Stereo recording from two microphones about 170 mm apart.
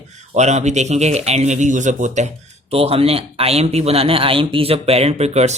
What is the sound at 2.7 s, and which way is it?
Speech, 35° right (ahead or behind).